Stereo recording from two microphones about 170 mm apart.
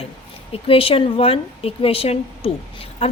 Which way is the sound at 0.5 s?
35° left (ahead or behind).